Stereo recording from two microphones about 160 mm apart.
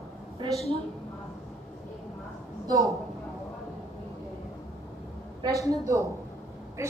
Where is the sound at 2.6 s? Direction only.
20° right (ahead or behind).